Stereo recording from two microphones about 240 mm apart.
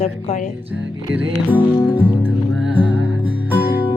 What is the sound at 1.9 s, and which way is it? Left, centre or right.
Music, centre.